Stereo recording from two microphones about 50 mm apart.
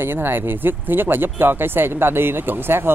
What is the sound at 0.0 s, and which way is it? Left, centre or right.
Speech, right.